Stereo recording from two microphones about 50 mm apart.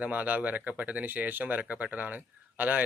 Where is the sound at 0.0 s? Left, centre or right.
Right.